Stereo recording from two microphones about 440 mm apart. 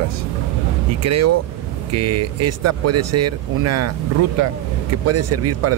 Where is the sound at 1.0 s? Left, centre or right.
Right.